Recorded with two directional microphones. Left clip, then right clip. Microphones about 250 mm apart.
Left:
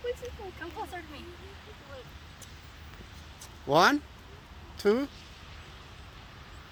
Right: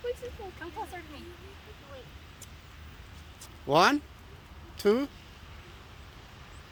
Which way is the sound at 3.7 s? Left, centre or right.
Centre.